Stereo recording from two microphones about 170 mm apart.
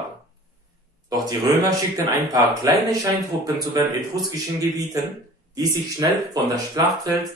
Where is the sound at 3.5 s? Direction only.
20° right (ahead or behind).